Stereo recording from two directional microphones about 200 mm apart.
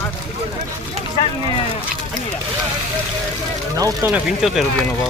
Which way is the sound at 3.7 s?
15° right (ahead or behind).